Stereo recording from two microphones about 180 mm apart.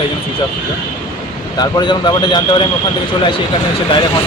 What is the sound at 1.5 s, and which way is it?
Speech, 25° left (ahead or behind).